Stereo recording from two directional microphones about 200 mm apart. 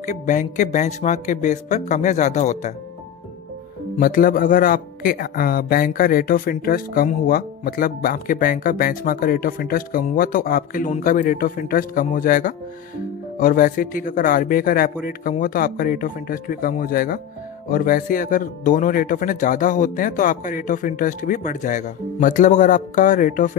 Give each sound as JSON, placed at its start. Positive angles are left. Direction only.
{"t": 0.0, "sound": "speech", "side_deg": 40}
{"t": 4.0, "sound": "speech", "side_deg": 45}